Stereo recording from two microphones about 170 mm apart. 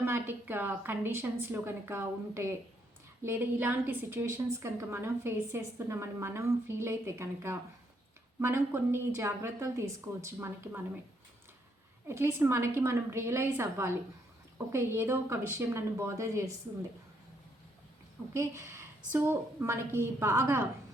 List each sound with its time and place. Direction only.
0.0 s a woman's voice: 15° right (ahead or behind)
12.0 s a woman's voice: 15° right (ahead or behind)
18.3 s a woman's voice: 15° right (ahead or behind)